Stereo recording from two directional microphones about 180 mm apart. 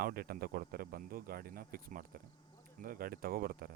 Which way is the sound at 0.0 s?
55° right (ahead or behind).